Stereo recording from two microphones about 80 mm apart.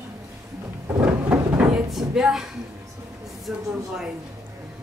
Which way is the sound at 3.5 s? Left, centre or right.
Centre.